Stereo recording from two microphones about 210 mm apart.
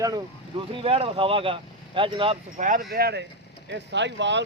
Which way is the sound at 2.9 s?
50° right (ahead or behind).